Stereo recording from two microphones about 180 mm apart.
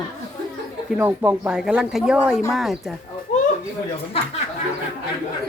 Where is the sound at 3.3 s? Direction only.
40° left (ahead or behind).